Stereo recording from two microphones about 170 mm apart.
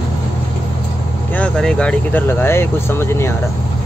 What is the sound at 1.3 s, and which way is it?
Speech, 5° left (ahead or behind).